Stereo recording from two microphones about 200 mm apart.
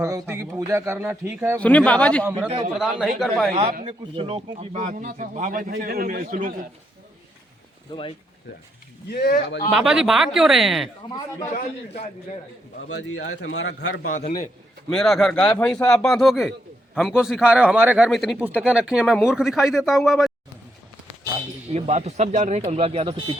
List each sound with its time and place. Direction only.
0.0 s speech: 15° right (ahead or behind)
1.5 s a man's voice: 5° left (ahead or behind)
3.5 s speech: 30° right (ahead or behind)
7.9 s speech: 25° left (ahead or behind)
9.0 s speech: 50° left (ahead or behind)
9.7 s a man's voice: 5° right (ahead or behind)
11.0 s speech: 25° left (ahead or behind)
12.9 s a man's voice: 60° left (ahead or behind)
14.1 s a man's voice: 35° left (ahead or behind)
14.8 s a man's voice: centre (ahead or behind)
21.7 s speech: 30° right (ahead or behind)